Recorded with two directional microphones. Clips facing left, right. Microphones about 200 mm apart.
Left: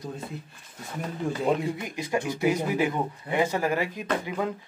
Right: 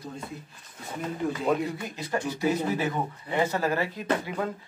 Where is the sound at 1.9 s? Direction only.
15° left (ahead or behind).